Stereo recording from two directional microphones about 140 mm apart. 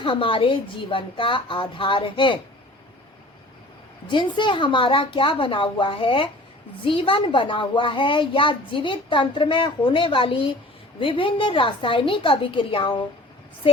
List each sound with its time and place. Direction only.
0.0 s a woman's voice: 40° left (ahead or behind)
4.1 s a woman's voice: 35° left (ahead or behind)